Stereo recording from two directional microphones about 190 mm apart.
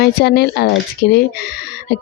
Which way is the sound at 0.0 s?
55° left (ahead or behind).